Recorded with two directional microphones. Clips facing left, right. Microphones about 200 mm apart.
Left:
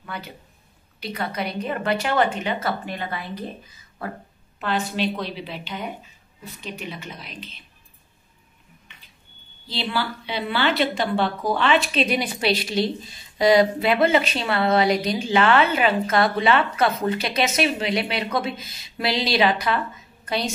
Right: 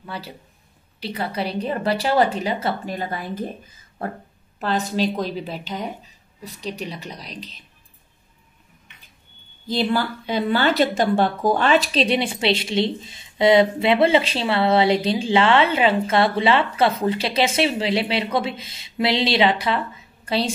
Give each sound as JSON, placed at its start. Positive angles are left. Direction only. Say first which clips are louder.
{"t": 0.0, "sound": "a sound", "louder": "right 1 dB", "side_deg": -30}
{"t": 0.9, "sound": "speech", "louder": "right 2 dB", "side_deg": -30}
{"t": 4.6, "sound": "speech", "louder": "right 3 dB", "side_deg": -40}
{"t": 9.7, "sound": "a woman's voice", "louder": "right 5 dB", "side_deg": -45}